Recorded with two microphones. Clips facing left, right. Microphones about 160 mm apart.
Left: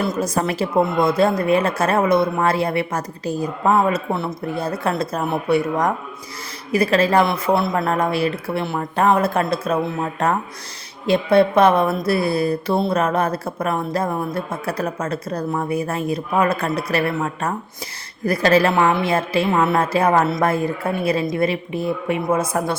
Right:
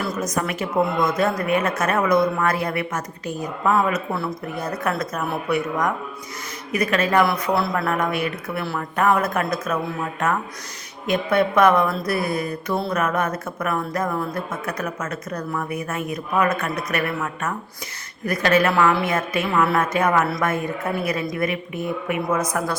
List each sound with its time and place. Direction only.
0.0 s speech: 25° left (ahead or behind)
18.7 s speech: 20° left (ahead or behind)